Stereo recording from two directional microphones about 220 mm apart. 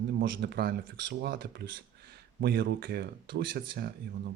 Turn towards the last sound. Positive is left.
turn(degrees=-45)  # may be behind; listen again after turning